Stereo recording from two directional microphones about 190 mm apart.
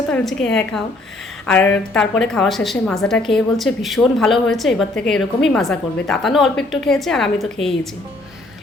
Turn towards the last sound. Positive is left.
turn(degrees=0)  # may be behind; listen again after turning